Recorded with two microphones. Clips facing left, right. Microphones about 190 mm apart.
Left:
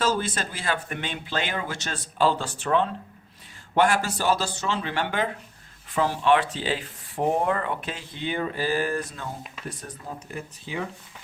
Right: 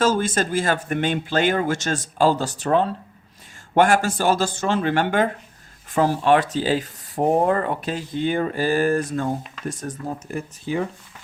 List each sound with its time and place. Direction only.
0.0 s speech: 45° right (ahead or behind)